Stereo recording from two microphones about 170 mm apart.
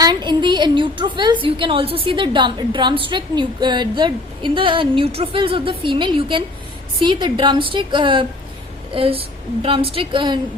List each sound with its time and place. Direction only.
0.0 s a woman's voice: 25° right (ahead or behind)